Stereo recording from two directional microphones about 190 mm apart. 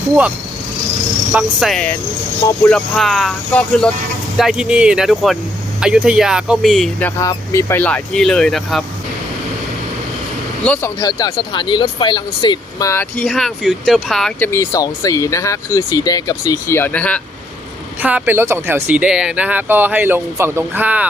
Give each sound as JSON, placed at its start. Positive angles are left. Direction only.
{"t": 1.3, "sound": "speech", "side_deg": -5}
{"t": 7.2, "sound": "speech", "side_deg": 15}
{"t": 11.0, "sound": "speech", "side_deg": 20}
{"t": 13.2, "sound": "speech", "side_deg": 0}
{"t": 18.0, "sound": "speech", "side_deg": -10}